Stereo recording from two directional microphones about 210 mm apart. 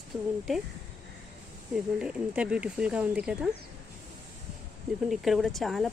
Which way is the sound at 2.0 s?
5° right (ahead or behind).